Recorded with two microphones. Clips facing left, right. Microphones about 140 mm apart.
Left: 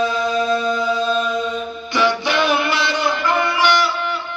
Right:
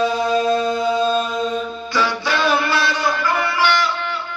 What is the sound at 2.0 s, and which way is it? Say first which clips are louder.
Music: left 3 dB; 20° left (ahead or behind).